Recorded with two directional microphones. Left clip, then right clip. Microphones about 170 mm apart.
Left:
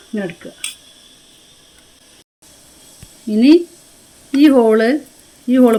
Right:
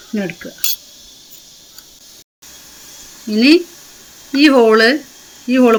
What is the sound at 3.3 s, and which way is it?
Speech, 30° left (ahead or behind).